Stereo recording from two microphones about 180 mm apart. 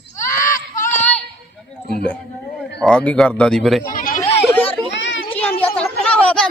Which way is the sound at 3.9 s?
45° left (ahead or behind).